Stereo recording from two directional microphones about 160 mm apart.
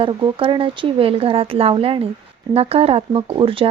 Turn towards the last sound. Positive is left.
turn(degrees=-35)  # may be behind; listen again after turning